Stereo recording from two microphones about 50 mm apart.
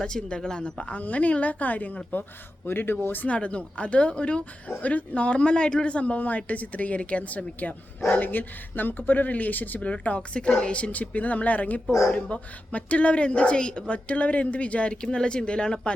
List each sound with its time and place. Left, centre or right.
0.0 s speech: centre; by 2.0 s left
2.6 s speech: left
3.2 s speech: left
9.9 s speech: left